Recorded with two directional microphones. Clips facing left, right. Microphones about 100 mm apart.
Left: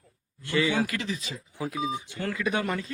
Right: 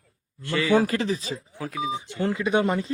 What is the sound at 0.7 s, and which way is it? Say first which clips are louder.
Speech: right 7 dB; 35° right (ahead or behind).